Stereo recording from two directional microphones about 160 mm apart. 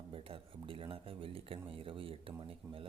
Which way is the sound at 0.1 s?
35° right (ahead or behind).